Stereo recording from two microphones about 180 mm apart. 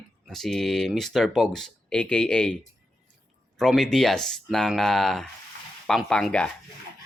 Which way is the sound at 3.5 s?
Centre (ahead or behind).